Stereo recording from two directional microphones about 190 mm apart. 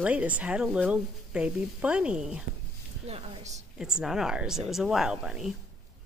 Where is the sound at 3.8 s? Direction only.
5° right (ahead or behind).